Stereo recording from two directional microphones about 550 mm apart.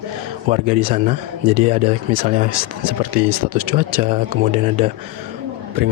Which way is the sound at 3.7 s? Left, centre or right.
Centre.